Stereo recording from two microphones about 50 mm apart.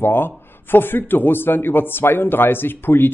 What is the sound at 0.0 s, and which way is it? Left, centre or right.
A man's voice, left.